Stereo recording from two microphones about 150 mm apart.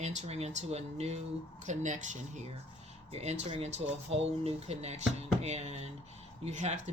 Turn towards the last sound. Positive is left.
turn(degrees=-50)  # may be behind; listen again after turning